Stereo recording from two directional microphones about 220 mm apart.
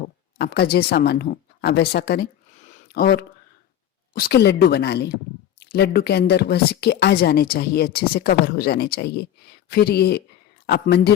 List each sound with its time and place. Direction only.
0.0 s speech: 45° left (ahead or behind)
2.6 s a sound: 35° left (ahead or behind)
4.1 s speech: 45° left (ahead or behind)